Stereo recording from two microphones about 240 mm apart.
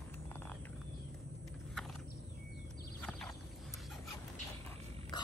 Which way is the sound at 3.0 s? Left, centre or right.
Centre.